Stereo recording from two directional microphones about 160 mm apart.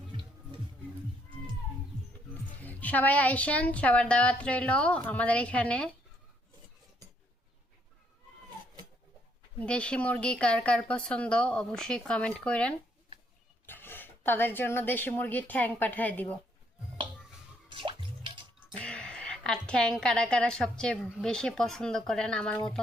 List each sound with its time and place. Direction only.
2.6 s a woman's voice: 10° left (ahead or behind)
9.6 s a woman's voice: 5° left (ahead or behind)
17.7 s drip: 30° right (ahead or behind)
18.8 s a woman's voice: 5° left (ahead or behind)